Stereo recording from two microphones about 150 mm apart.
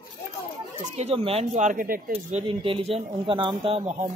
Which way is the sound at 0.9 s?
40° right (ahead or behind).